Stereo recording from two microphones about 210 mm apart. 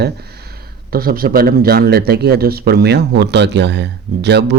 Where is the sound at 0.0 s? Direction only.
50° right (ahead or behind).